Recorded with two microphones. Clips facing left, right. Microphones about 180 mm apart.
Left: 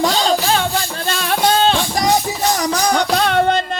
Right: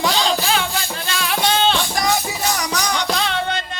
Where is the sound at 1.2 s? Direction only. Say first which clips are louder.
Left 3 dB; 45° left (ahead or behind).